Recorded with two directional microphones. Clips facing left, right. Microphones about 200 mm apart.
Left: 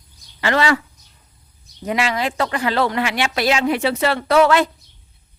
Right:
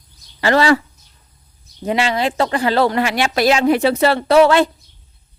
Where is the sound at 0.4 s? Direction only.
35° right (ahead or behind).